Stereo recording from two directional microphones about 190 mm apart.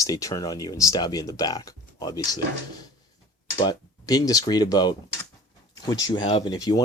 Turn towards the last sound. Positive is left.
turn(degrees=20)  # may be behind; listen again after turning